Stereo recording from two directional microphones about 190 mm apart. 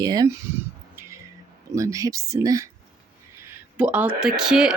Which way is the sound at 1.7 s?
15° right (ahead or behind).